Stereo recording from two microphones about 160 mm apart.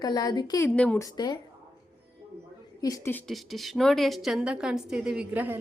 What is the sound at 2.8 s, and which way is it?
Speech, 20° left (ahead or behind).